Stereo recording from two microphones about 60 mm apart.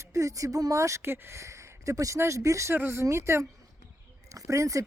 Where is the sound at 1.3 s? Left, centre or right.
Right.